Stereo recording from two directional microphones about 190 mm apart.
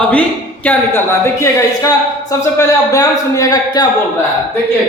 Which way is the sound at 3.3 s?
20° left (ahead or behind).